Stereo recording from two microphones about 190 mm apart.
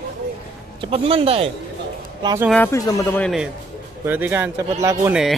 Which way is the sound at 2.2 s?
15° right (ahead or behind).